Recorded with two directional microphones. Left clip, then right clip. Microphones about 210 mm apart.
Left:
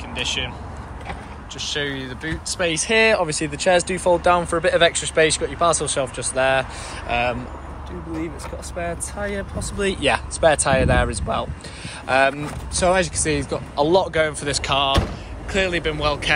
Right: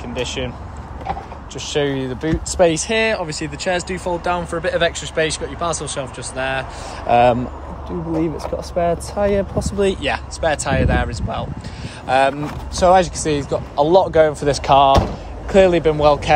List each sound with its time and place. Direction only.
0.2 s speech: 35° right (ahead or behind)
1.7 s speech: 35° right (ahead or behind)
2.7 s speech: 10° right (ahead or behind)
7.1 s speech: 30° right (ahead or behind)
8.7 s speech: 25° right (ahead or behind)
10.0 s speech: centre (ahead or behind); by 16.3 s 25° right (ahead or behind)